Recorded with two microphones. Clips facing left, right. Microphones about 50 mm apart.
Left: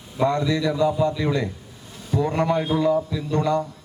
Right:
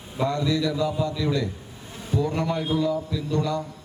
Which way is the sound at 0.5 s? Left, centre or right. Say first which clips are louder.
Left 3 dB; left.